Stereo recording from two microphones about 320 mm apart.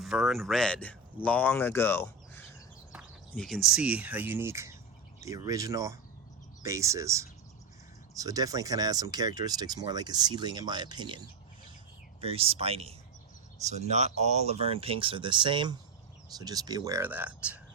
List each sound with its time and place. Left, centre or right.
0.0 s speech: centre
12.2 s speech: centre